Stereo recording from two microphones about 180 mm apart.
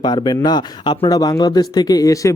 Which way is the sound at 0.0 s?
25° left (ahead or behind).